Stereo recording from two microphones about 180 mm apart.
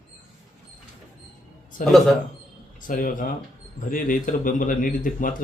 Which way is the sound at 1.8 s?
50° left (ahead or behind).